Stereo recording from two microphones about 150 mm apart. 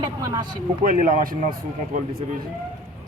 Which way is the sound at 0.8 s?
65° right (ahead or behind).